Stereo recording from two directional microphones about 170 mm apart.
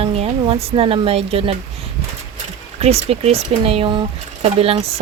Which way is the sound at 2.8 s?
35° right (ahead or behind).